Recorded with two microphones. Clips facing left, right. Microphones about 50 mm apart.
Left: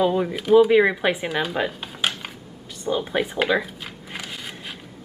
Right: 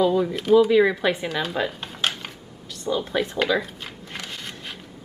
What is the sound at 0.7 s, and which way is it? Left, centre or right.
Speech, left.